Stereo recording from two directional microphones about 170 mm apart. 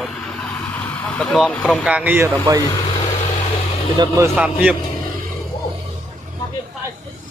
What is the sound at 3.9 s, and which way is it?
Speech, 20° right (ahead or behind).